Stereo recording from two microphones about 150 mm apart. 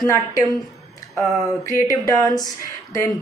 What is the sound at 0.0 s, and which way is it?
Speech, 20° left (ahead or behind).